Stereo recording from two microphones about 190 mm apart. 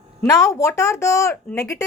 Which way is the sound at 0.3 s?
20° left (ahead or behind).